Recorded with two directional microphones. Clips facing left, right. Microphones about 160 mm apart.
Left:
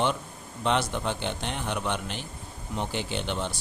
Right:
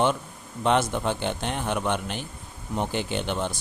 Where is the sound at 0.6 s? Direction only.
50° right (ahead or behind).